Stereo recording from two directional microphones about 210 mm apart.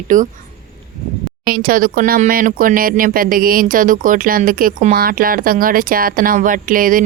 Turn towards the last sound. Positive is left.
turn(degrees=-40)  # may be behind; listen again after turning